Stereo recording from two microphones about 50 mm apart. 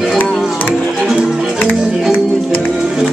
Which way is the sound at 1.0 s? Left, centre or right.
Centre.